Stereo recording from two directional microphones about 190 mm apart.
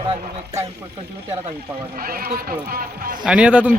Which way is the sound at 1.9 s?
50° right (ahead or behind).